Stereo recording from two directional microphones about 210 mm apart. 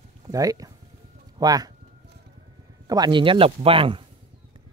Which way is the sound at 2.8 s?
20° right (ahead or behind).